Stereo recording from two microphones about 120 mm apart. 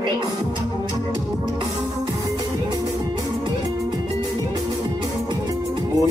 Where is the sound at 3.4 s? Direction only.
40° right (ahead or behind).